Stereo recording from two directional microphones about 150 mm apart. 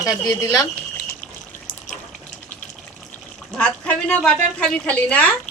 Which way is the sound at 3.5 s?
5° left (ahead or behind).